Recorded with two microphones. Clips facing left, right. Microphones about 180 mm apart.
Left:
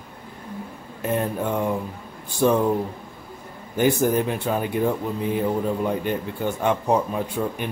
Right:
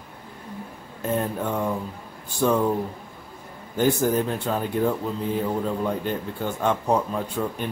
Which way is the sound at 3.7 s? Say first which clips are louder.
Left 1 dB; 15° left (ahead or behind).